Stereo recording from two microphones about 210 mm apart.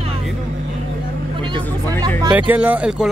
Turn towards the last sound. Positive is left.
turn(degrees=-5)  # may be behind; listen again after turning